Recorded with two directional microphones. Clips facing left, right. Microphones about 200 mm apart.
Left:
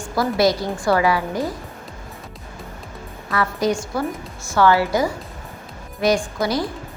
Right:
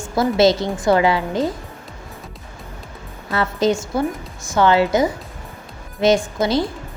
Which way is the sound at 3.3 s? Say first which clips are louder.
Right 2 dB; 25° right (ahead or behind).